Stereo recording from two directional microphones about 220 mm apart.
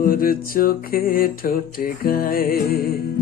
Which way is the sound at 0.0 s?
40° left (ahead or behind).